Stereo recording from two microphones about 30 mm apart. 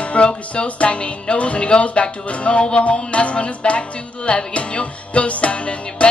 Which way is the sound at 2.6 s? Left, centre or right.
Left.